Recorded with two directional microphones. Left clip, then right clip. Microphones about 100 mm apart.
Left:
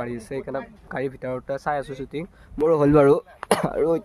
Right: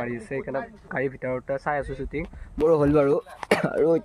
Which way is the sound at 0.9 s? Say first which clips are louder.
Right 1 dB; 15° left (ahead or behind).